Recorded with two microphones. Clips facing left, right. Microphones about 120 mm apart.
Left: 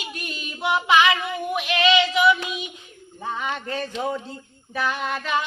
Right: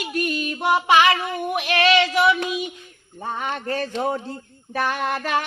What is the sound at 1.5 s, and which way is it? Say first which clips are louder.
Child singing: right 1 dB; 60° right (ahead or behind).